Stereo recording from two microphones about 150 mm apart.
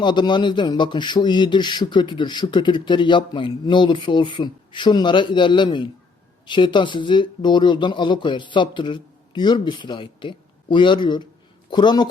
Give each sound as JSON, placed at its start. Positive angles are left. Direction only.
{"t": 0.0, "sound": "a man's voice", "side_deg": 30}